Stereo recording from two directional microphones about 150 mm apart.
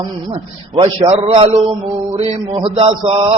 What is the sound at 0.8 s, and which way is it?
Speech, 40° right (ahead or behind).